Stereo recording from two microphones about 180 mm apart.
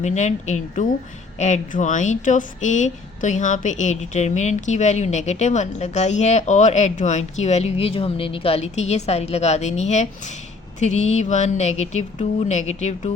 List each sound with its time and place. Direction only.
0.0 s speech: 40° left (ahead or behind)